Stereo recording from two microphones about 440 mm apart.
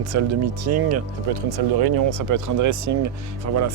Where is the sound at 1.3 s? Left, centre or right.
Right.